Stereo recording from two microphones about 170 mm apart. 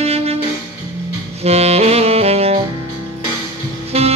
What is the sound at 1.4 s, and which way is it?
Saxophone, 40° right (ahead or behind).